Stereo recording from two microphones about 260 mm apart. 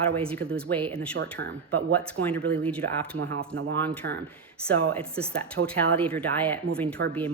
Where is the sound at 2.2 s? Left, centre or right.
Right.